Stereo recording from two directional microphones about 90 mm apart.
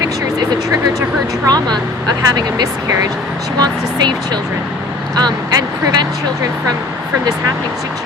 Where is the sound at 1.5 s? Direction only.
50° right (ahead or behind).